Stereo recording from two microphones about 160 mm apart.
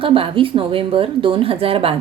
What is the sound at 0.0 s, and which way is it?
A woman's voice, 35° right (ahead or behind).